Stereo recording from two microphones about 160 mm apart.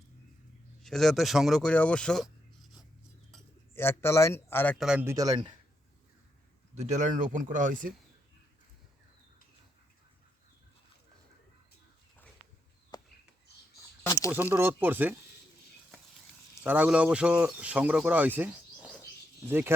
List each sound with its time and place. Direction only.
0.8 s speech: centre (ahead or behind)
3.8 s speech: 15° left (ahead or behind)
4.8 s speech: 5° right (ahead or behind)
5.0 s speech: 20° right (ahead or behind)
6.7 s speech: 50° right (ahead or behind)
12.9 s a sound: 25° left (ahead or behind)
14.3 s speech: 10° right (ahead or behind)
16.6 s speech: 10° right (ahead or behind)